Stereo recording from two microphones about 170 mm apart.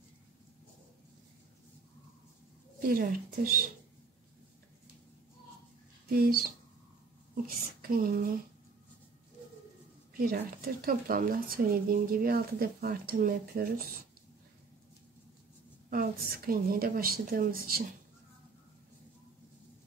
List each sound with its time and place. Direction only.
2.9 s a woman's voice: 55° right (ahead or behind)
6.0 s a woman's voice: 60° right (ahead or behind)
10.1 s a woman's voice: 60° right (ahead or behind)
15.9 s a woman's voice: 60° right (ahead or behind)